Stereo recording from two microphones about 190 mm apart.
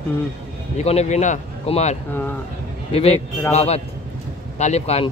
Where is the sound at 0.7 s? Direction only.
35° left (ahead or behind).